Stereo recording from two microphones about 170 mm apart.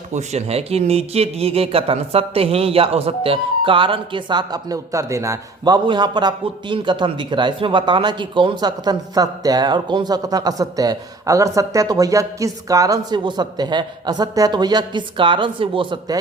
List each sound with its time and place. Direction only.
0.1 s speech: 40° right (ahead or behind)